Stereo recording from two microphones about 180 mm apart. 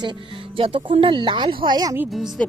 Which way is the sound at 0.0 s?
25° right (ahead or behind).